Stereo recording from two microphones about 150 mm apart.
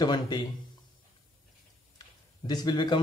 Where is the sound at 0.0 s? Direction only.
30° left (ahead or behind).